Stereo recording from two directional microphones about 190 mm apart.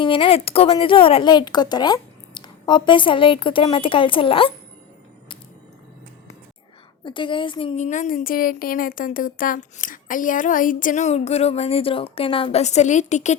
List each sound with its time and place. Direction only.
0.0 s speech: 25° left (ahead or behind)
7.0 s a woman's voice: 25° left (ahead or behind)